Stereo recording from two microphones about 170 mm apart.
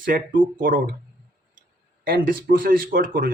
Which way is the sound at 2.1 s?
60° right (ahead or behind).